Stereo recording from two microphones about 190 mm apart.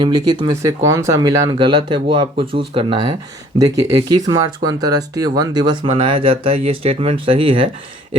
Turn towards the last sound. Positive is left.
turn(degrees=-25)  # may be behind; listen again after turning